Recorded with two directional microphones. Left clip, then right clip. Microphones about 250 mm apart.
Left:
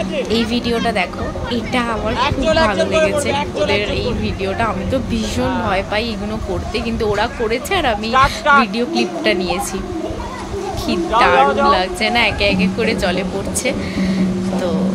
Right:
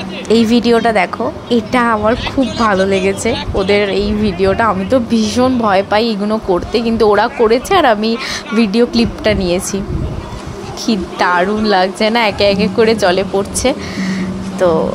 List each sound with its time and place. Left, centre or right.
0.3 s a woman's voice: right
10.9 s a woman's voice: right